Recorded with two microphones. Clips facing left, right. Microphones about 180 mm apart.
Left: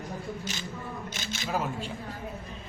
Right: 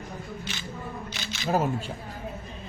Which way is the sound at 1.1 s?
45° left (ahead or behind).